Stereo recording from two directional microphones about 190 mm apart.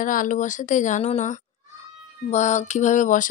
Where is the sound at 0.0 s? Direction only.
45° left (ahead or behind).